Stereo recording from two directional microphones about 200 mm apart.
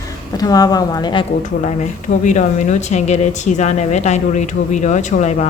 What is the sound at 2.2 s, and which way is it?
Speech, 35° left (ahead or behind).